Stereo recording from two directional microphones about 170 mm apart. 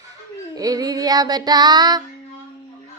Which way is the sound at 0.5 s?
20° right (ahead or behind).